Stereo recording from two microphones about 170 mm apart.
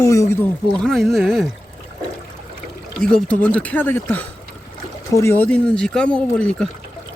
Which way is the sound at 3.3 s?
5° left (ahead or behind).